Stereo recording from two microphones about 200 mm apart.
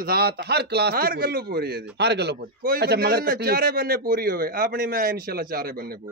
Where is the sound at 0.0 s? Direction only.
50° right (ahead or behind).